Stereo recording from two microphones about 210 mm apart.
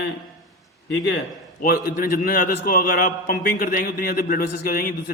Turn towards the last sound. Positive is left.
turn(degrees=45)  # may be behind; listen again after turning